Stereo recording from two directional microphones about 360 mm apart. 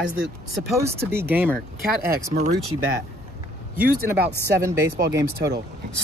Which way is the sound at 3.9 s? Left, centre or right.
Right.